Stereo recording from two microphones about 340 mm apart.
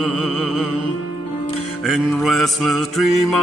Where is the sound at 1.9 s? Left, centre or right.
Centre.